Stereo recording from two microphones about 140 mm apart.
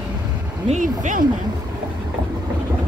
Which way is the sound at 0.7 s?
65° right (ahead or behind).